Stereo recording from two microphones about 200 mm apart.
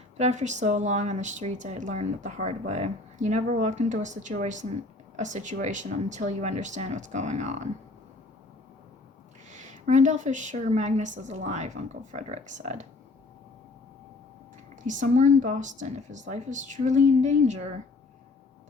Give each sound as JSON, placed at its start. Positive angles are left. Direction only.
{"t": 0.2, "sound": "speech", "side_deg": -35}
{"t": 9.5, "sound": "speech", "side_deg": -35}
{"t": 14.8, "sound": "speech", "side_deg": -40}